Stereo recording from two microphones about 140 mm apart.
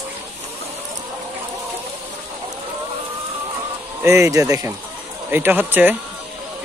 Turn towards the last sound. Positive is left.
turn(degrees=-15)  # may be behind; listen again after turning